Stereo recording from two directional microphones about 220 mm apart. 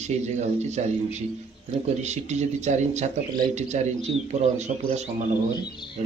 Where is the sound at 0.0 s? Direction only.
30° right (ahead or behind).